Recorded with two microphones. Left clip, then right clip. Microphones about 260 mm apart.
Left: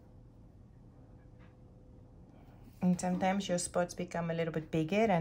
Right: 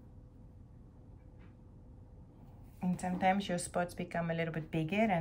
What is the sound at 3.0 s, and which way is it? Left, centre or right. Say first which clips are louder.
Speech: right 3 dB; centre.